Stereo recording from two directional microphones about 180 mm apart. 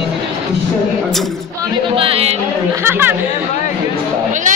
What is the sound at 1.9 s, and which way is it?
Speech, 30° right (ahead or behind).